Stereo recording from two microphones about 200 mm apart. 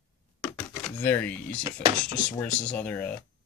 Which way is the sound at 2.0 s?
5° left (ahead or behind).